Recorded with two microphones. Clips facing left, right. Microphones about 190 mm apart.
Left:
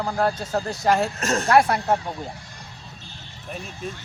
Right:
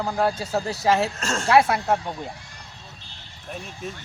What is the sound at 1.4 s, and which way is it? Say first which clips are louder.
Speech: right 1 dB; centre (ahead or behind).